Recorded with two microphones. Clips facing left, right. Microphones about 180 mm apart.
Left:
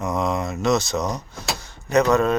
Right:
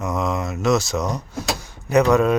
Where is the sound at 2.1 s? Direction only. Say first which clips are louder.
Right 3 dB; 10° right (ahead or behind).